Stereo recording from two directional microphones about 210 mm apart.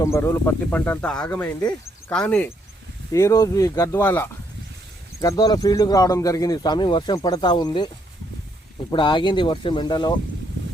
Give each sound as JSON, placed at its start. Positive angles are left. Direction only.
{"t": 0.0, "sound": "speech", "side_deg": 15}